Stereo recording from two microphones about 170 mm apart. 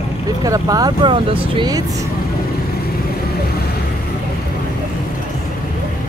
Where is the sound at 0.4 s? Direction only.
20° right (ahead or behind).